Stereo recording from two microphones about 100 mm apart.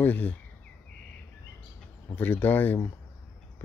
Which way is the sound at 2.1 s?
20° left (ahead or behind).